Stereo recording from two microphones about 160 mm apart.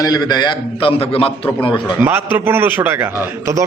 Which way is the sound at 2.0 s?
15° right (ahead or behind).